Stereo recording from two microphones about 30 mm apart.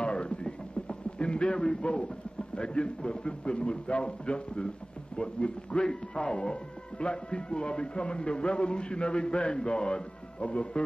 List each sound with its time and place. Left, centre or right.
0.0 s speech: left